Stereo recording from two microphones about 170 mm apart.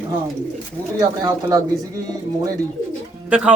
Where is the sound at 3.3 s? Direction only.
5° right (ahead or behind).